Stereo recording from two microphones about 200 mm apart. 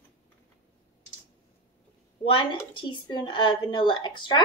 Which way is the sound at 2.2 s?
25° left (ahead or behind).